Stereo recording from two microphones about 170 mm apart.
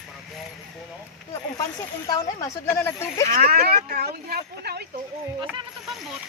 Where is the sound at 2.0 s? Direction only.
20° left (ahead or behind).